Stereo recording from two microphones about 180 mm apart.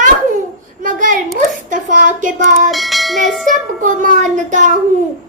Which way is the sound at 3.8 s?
45° right (ahead or behind).